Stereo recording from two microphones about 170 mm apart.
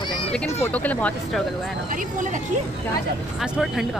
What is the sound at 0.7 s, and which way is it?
Speech, 10° left (ahead or behind).